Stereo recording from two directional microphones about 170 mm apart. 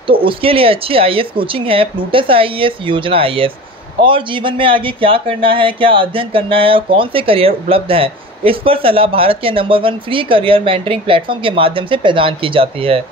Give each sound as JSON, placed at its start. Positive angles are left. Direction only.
{"t": 0.0, "sound": "speech", "side_deg": -30}